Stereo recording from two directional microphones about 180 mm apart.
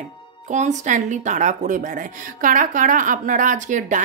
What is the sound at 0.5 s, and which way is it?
Speech, 40° right (ahead or behind).